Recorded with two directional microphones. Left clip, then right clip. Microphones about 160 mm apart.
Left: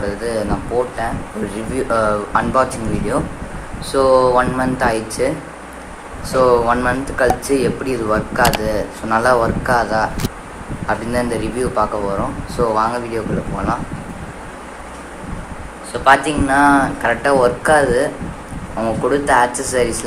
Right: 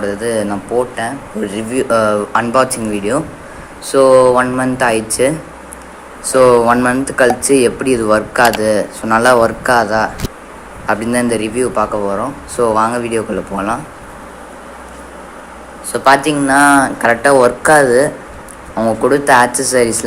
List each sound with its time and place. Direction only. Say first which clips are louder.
0.0 s speech: right 4 dB; 45° right (ahead or behind)
1.7 s speech: right 4 dB; 40° right (ahead or behind)
6.3 s speech: right 5 dB; 50° right (ahead or behind)
15.9 s speech: right 2 dB; 50° right (ahead or behind)